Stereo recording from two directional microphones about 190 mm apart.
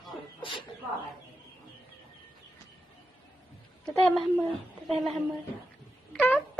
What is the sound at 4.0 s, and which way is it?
Speech, 5° left (ahead or behind).